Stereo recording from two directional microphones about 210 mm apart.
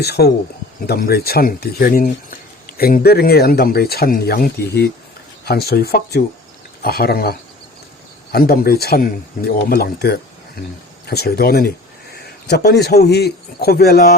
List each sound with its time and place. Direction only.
0.0 s a man's voice: 50° left (ahead or behind)